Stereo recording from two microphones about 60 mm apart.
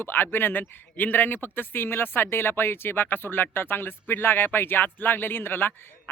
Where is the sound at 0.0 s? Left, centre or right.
Left.